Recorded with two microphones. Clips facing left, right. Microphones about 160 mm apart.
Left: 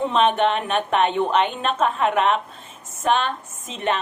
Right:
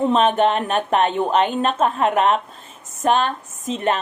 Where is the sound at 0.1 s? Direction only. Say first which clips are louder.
Right 2 dB; 40° right (ahead or behind).